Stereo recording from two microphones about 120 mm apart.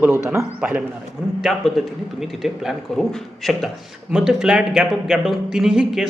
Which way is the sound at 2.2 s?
5° right (ahead or behind).